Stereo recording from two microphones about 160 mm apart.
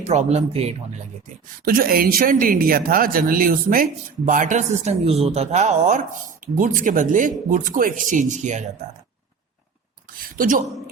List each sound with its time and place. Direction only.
0.0 s speech: 45° right (ahead or behind)
1.6 s speech: 65° right (ahead or behind); by 8.6 s 50° right (ahead or behind)
10.2 s a sound: 60° right (ahead or behind)